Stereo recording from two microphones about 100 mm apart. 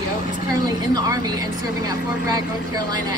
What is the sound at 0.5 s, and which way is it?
A woman's voice, 40° right (ahead or behind).